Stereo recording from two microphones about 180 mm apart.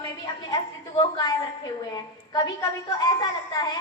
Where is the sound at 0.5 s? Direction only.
20° left (ahead or behind).